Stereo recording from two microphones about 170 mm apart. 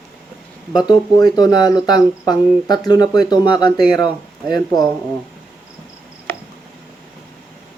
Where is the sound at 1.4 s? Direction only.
25° left (ahead or behind).